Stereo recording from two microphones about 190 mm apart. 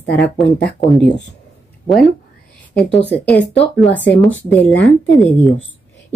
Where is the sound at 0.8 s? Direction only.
Centre (ahead or behind).